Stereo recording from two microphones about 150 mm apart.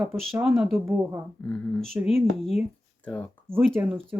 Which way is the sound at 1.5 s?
5° left (ahead or behind).